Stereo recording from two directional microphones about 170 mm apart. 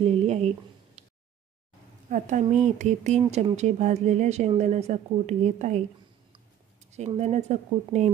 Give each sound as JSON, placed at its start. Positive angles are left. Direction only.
{"t": 0.0, "sound": "speech", "side_deg": -35}
{"t": 2.0, "sound": "speech", "side_deg": -45}
{"t": 6.9, "sound": "speech", "side_deg": -40}